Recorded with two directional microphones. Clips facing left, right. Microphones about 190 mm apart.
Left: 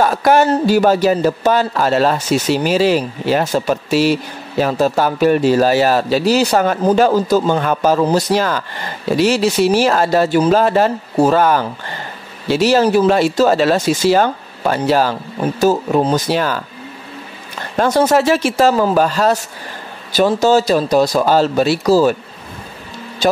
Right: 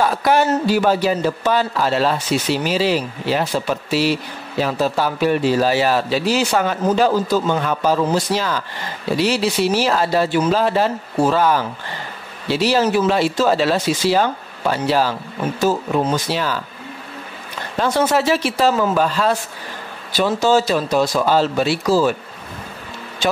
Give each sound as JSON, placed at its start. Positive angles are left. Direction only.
{"t": 0.0, "sound": "speech", "side_deg": 45}
{"t": 15.6, "sound": "a man's voice", "side_deg": 35}
{"t": 16.3, "sound": "speech", "side_deg": 50}
{"t": 17.7, "sound": "a man's voice", "side_deg": 40}
{"t": 23.2, "sound": "a man's voice", "side_deg": 40}